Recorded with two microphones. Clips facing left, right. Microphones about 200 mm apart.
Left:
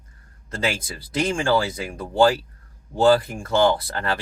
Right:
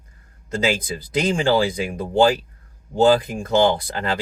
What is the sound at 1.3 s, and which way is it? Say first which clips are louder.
Speech: right 4 dB; 20° right (ahead or behind).